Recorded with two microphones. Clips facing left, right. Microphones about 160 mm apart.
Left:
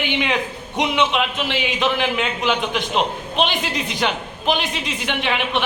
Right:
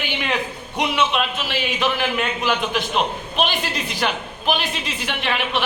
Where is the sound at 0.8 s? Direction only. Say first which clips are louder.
Left 1 dB; 20° left (ahead or behind).